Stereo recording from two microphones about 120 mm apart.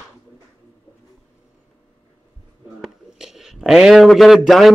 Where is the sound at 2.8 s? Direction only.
5° right (ahead or behind).